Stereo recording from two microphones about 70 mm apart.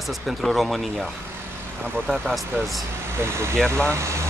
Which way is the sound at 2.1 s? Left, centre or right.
Centre.